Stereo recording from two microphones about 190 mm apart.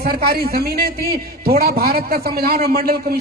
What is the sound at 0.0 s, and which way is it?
A man's voice, 55° right (ahead or behind).